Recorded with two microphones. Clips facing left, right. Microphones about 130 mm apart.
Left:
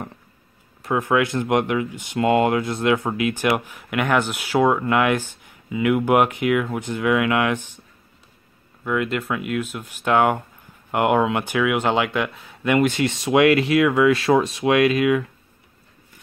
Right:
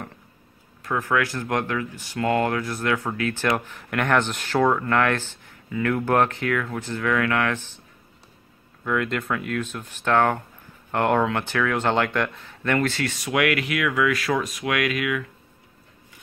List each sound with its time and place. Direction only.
0.8 s speech: 20° left (ahead or behind)
8.8 s speech: 5° left (ahead or behind); by 15.2 s 30° left (ahead or behind)